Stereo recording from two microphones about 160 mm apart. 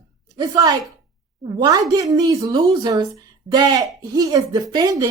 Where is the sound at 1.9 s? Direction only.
20° right (ahead or behind).